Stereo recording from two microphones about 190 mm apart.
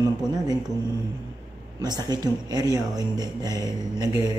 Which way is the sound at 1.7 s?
20° right (ahead or behind).